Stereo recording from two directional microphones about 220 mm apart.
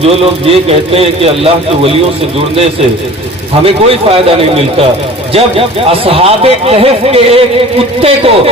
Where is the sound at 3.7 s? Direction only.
25° right (ahead or behind).